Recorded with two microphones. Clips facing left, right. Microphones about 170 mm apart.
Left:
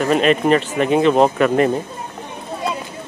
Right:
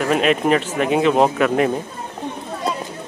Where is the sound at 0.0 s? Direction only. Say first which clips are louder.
Left 2 dB; 5° right (ahead or behind).